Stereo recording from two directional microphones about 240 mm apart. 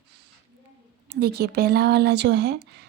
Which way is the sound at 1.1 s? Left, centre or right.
Right.